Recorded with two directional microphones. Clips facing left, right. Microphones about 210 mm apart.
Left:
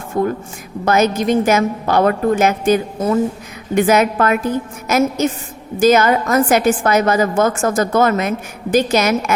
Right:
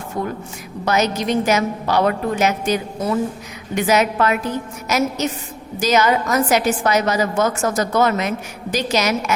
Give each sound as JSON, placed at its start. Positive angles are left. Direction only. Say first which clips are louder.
{"t": 0.9, "sound": "a woman's voice", "louder": "left 4 dB", "side_deg": 50}